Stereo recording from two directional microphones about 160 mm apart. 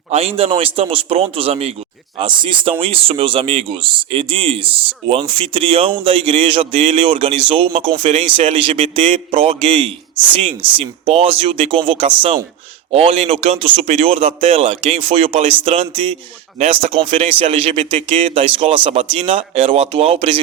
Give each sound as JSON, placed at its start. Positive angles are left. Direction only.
{"t": 0.1, "sound": "speech", "side_deg": -40}